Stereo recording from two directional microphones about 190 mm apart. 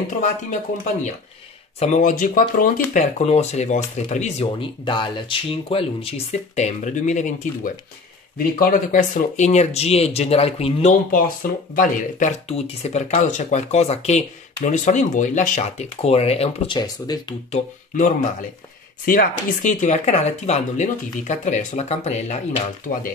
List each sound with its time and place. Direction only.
0.1 s speech: 40° left (ahead or behind)
1.8 s speech: 40° left (ahead or behind)
16.7 s speech: 20° left (ahead or behind)
17.5 s speech: 40° left (ahead or behind)